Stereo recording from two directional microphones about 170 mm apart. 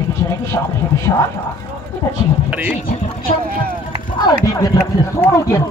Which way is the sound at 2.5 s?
5° right (ahead or behind).